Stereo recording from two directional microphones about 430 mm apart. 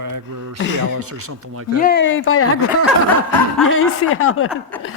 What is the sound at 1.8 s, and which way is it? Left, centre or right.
Speech, left.